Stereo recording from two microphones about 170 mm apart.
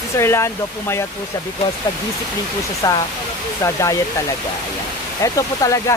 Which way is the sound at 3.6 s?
20° left (ahead or behind).